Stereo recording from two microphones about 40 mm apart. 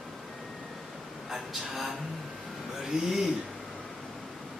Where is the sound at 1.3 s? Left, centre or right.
Centre.